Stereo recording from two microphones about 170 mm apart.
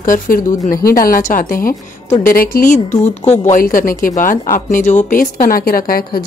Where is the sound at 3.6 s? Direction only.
55° left (ahead or behind).